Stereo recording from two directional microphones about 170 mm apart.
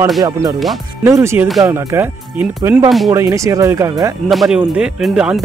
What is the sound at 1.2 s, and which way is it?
Speech, 15° right (ahead or behind).